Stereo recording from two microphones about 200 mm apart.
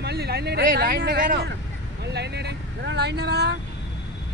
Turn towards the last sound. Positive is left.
turn(degrees=-55)  # may be behind; listen again after turning